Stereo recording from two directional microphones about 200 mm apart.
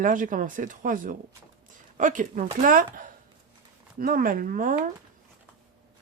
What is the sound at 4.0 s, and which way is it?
Speech, 45° right (ahead or behind).